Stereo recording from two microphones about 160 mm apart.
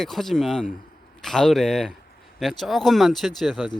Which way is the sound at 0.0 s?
Centre (ahead or behind).